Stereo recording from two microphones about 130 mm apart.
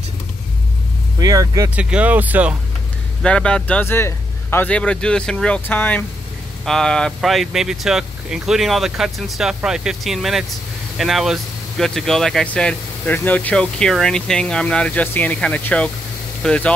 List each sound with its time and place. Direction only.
1.2 s speech: 30° right (ahead or behind)
1.8 s speech: 10° right (ahead or behind)
3.2 s speech: 5° left (ahead or behind)